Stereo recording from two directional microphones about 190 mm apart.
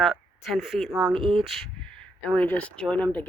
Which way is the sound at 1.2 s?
30° right (ahead or behind).